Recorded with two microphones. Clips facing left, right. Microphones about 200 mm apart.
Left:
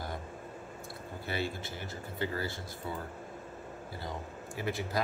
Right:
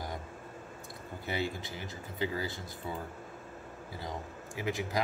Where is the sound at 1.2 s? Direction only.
15° right (ahead or behind).